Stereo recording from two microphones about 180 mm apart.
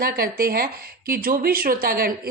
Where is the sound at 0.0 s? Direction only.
55° right (ahead or behind).